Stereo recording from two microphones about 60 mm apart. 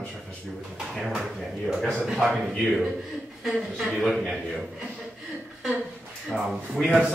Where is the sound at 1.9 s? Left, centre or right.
Centre.